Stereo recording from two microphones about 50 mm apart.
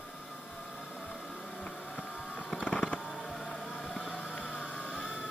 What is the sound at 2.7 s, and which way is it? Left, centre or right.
Music, left.